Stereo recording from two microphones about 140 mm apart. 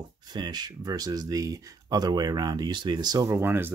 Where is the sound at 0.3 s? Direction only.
30° right (ahead or behind).